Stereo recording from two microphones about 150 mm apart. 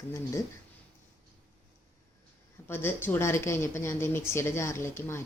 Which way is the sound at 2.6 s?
15° left (ahead or behind).